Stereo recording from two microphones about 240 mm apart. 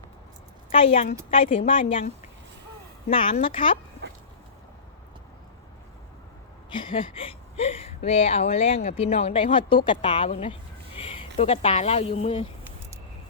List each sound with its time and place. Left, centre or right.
0.7 s a woman's voice: left
6.7 s speech: left